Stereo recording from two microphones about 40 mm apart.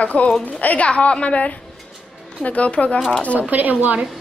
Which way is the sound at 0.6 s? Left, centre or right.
Left.